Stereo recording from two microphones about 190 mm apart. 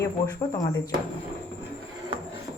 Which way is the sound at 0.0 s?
15° left (ahead or behind).